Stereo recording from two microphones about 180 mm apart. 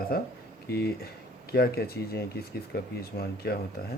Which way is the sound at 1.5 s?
60° left (ahead or behind).